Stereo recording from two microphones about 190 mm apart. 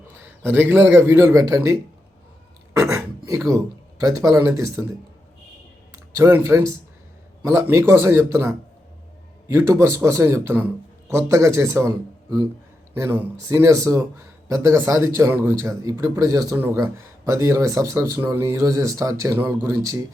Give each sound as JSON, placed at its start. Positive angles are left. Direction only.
{"t": 0.1, "sound": "a man's voice", "side_deg": -10}
{"t": 2.7, "sound": "a sound", "side_deg": -15}
{"t": 3.2, "sound": "speech", "side_deg": -15}
{"t": 6.1, "sound": "speech", "side_deg": -15}